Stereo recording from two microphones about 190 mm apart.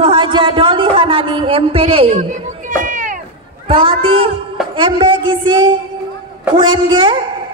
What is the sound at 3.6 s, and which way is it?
A woman's voice, 30° right (ahead or behind).